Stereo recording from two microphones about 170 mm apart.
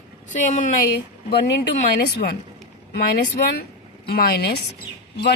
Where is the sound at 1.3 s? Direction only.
75° left (ahead or behind).